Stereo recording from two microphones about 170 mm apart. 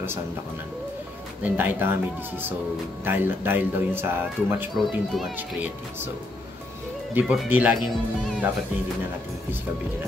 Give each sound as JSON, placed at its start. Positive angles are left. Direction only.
{"t": 1.4, "sound": "speech", "side_deg": -10}
{"t": 4.7, "sound": "speech", "side_deg": 0}
{"t": 7.2, "sound": "speech", "side_deg": -10}